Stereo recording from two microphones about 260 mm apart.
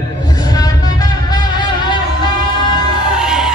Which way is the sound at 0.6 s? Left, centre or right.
Centre.